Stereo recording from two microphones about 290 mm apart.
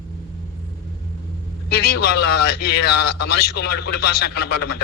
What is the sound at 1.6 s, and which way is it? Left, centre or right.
A man's voice, left.